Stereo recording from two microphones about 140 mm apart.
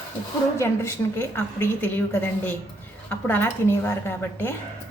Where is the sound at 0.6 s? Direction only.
20° left (ahead or behind).